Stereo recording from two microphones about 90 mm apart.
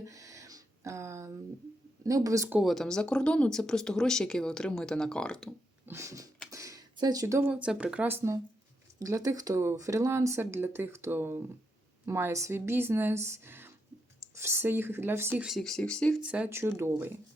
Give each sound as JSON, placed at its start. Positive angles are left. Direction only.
{"t": 0.0, "sound": "a sound", "side_deg": -40}
{"t": 2.0, "sound": "speech", "side_deg": -40}
{"t": 2.6, "sound": "speech", "side_deg": 0}
{"t": 5.8, "sound": "cat", "side_deg": -30}
{"t": 6.5, "sound": "a sound", "side_deg": -40}
{"t": 6.9, "sound": "speech", "side_deg": -45}
{"t": 7.5, "sound": "speech", "side_deg": -10}
{"t": 9.0, "sound": "speech", "side_deg": -40}
{"t": 15.4, "sound": "speech", "side_deg": -5}
{"t": 16.2, "sound": "speech", "side_deg": -15}
{"t": 16.5, "sound": "speech", "side_deg": -30}